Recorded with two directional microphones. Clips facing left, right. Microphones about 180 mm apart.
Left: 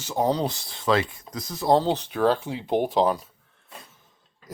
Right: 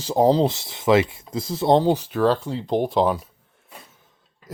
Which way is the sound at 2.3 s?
10° left (ahead or behind).